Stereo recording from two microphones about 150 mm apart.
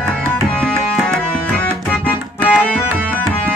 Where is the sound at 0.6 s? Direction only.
5° left (ahead or behind).